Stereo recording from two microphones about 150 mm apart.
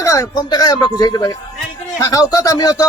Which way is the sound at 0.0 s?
20° left (ahead or behind).